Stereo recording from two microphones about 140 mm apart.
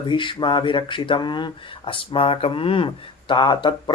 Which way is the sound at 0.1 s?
35° left (ahead or behind).